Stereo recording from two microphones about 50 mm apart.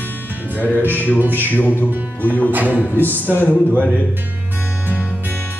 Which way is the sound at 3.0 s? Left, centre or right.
Left.